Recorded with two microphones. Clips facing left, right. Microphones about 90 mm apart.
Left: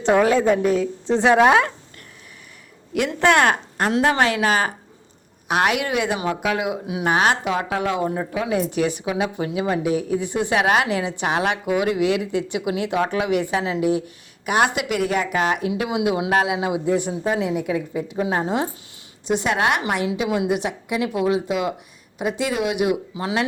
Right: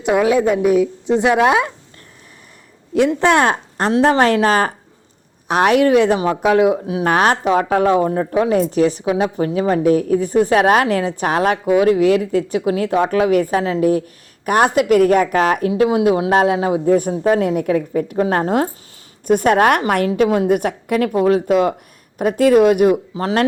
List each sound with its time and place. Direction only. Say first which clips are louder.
0.1 s a woman's voice: right 2 dB; 10° right (ahead or behind)
2.9 s a woman's voice: right 4 dB; 25° right (ahead or behind); by 23.5 s 45° right (ahead or behind)